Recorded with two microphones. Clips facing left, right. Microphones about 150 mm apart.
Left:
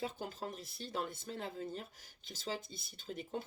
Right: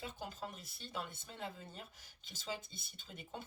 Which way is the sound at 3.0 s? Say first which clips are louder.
Left 8 dB; 45° left (ahead or behind).